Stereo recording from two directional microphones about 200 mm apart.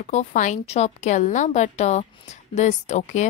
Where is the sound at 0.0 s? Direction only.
40° left (ahead or behind).